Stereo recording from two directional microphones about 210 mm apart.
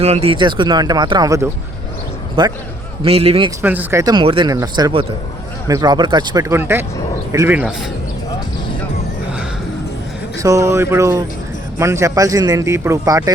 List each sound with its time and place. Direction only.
0.0 s speech: 30° right (ahead or behind)
3.6 s speech: 10° right (ahead or behind)
10.3 s speech: 15° right (ahead or behind)